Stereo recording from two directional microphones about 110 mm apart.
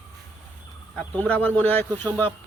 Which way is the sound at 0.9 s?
10° left (ahead or behind).